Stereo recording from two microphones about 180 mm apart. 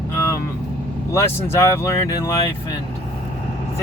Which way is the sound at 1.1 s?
15° left (ahead or behind).